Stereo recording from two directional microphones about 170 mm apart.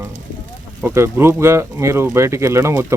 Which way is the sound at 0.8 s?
15° right (ahead or behind).